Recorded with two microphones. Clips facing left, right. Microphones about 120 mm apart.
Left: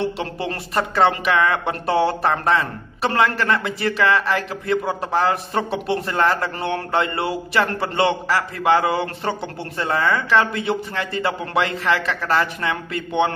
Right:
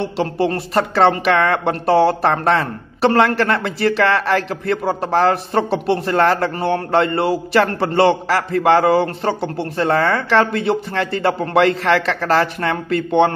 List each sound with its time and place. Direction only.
0.7 s a man's voice: 55° right (ahead or behind)
2.2 s a man's voice: 35° right (ahead or behind)
12.2 s a man's voice: 40° right (ahead or behind)